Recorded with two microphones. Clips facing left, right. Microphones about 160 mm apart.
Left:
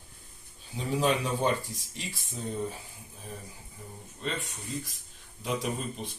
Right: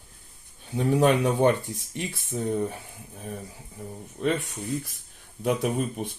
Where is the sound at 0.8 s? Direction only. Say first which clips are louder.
Right 7 dB; 60° right (ahead or behind).